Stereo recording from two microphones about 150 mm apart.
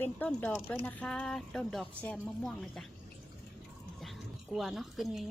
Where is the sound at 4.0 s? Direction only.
Centre (ahead or behind).